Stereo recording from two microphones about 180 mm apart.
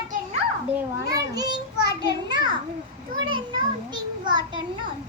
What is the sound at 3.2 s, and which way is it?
Speech, 25° right (ahead or behind).